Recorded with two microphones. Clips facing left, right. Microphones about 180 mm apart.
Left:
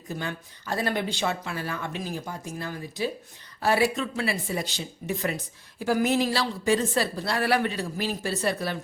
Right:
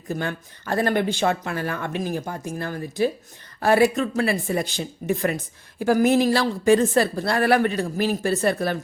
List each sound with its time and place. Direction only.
0.1 s speech: 55° right (ahead or behind)